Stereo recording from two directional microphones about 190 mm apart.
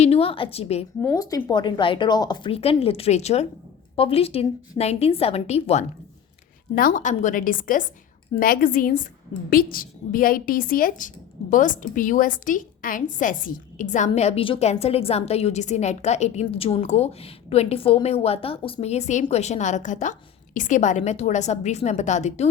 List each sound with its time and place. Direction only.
0.0 s a woman's voice: 30° left (ahead or behind)
1.0 s a woman's voice: 20° left (ahead or behind)
6.7 s a woman's voice: 45° left (ahead or behind)